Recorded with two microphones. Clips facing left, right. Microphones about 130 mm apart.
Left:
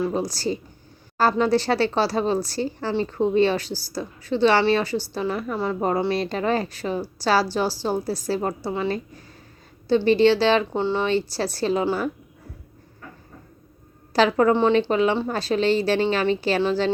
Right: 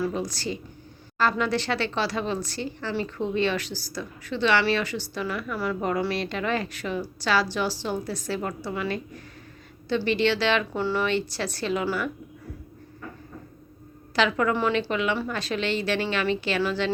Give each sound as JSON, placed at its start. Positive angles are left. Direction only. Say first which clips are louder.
{"t": 0.1, "sound": "a woman's voice", "louder": "left 5 dB", "side_deg": 35}
{"t": 14.1, "sound": "a woman's voice", "louder": "left 6 dB", "side_deg": 35}